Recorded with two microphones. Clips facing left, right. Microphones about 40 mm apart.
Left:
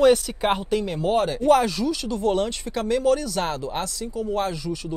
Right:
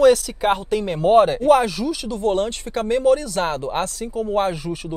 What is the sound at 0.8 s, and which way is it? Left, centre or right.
Speech, right.